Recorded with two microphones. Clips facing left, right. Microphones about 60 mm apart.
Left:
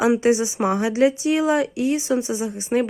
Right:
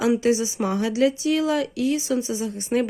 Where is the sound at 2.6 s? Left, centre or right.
Centre.